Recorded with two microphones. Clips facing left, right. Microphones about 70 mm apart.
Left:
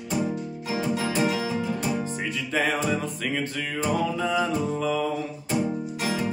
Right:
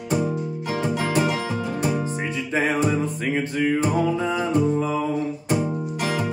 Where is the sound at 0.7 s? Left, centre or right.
Right.